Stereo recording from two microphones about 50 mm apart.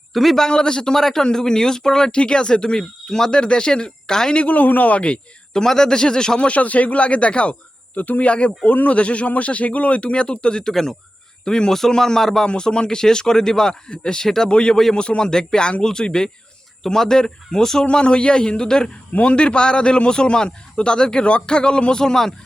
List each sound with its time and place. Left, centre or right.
0.1 s a man's voice: centre
4.4 s speech: left
5.5 s a man's voice: centre
6.5 s a man's voice: left; by 17.8 s centre
17.8 s a man's voice: left